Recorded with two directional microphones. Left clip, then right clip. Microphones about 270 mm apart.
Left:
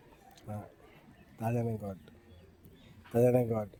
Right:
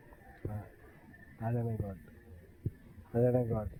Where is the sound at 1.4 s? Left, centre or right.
Left.